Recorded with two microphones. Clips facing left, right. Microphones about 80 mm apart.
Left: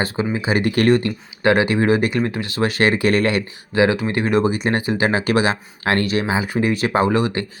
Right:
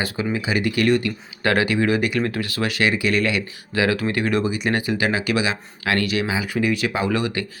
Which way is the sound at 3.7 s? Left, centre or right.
Left.